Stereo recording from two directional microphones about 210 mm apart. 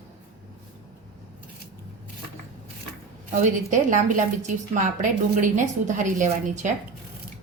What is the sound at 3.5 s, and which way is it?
A woman's voice, 35° right (ahead or behind).